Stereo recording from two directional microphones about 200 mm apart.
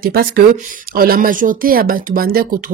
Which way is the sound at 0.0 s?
45° right (ahead or behind).